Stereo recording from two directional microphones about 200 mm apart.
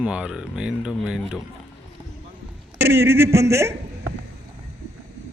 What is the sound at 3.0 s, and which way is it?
Speech, 10° right (ahead or behind).